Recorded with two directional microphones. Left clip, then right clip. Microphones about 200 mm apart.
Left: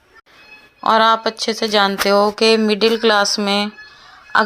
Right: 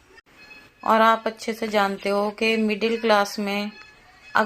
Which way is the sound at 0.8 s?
30° left (ahead or behind).